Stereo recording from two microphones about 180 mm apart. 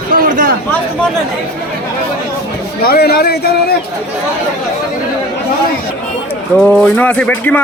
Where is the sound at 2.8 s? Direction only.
60° left (ahead or behind).